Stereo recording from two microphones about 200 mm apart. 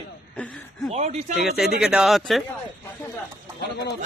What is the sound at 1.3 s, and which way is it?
Speech, centre (ahead or behind).